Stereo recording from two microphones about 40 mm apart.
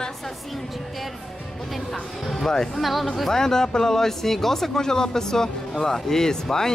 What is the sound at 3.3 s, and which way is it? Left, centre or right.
Speech, centre.